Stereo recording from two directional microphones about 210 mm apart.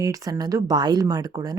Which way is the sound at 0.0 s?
15° right (ahead or behind).